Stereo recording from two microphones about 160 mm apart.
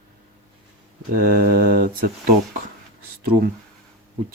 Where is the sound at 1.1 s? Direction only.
65° right (ahead or behind).